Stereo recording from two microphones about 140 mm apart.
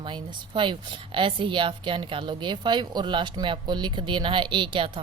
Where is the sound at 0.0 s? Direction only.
35° right (ahead or behind).